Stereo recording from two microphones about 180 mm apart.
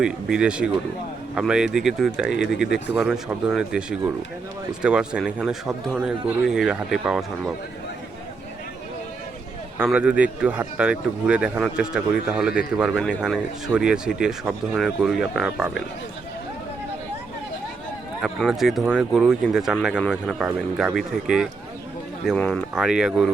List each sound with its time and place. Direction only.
0.0 s speech: 5° right (ahead or behind)
2.6 s speech: 80° left
3.0 s speech: centre (ahead or behind)
9.7 s speech: 5° right (ahead or behind)
18.2 s speech: centre (ahead or behind)